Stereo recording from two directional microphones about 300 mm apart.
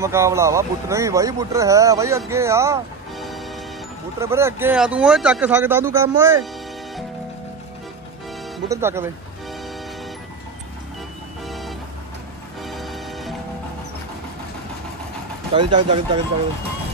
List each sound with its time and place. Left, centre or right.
0.0 s speech: centre
2.3 s music: centre
4.2 s speech: centre
8.6 s speech: centre
11.4 s music: centre
15.5 s speech: centre